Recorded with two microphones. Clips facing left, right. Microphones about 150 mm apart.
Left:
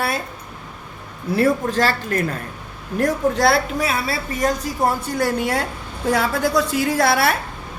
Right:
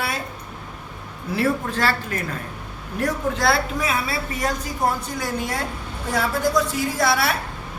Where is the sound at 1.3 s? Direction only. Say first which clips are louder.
Left 5 dB; 40° left (ahead or behind).